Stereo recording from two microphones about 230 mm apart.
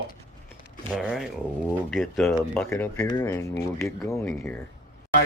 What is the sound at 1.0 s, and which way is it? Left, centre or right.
Speech, centre.